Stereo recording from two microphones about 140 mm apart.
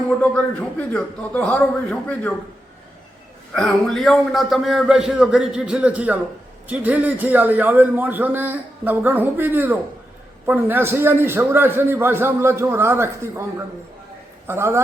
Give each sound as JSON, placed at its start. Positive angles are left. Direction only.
{"t": 0.2, "sound": "a man's voice", "side_deg": 10}
{"t": 3.5, "sound": "a man's voice", "side_deg": 5}
{"t": 14.4, "sound": "a man's voice", "side_deg": -20}